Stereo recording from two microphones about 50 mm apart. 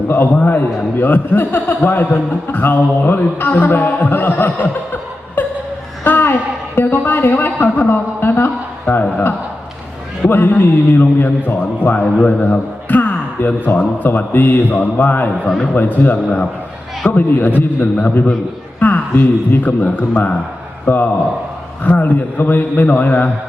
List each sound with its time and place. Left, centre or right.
0.3 s a man's voice: left
6.1 s a sound: left
6.7 s a man's voice: left
10.2 s a man's voice: left